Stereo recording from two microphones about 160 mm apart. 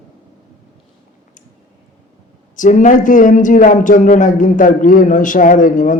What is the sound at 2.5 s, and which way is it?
A man's voice, 55° left (ahead or behind).